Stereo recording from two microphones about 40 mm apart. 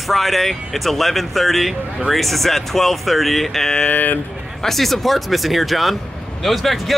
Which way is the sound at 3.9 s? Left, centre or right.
Left.